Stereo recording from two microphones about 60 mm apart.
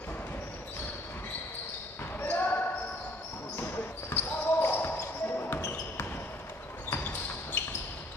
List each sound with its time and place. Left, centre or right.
2.1 s basketball bounce: left
6.9 s basketball bounce: left